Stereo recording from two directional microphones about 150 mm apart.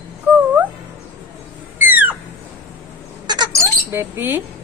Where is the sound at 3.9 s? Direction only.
15° right (ahead or behind).